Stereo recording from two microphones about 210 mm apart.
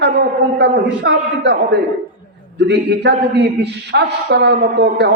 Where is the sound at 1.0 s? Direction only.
50° right (ahead or behind).